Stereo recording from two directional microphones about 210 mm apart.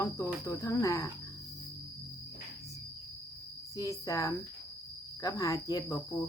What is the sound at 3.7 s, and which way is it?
Speech, 15° left (ahead or behind).